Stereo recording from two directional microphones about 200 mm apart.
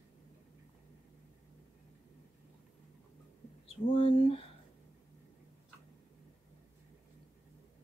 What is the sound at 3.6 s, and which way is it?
Speech, 25° left (ahead or behind).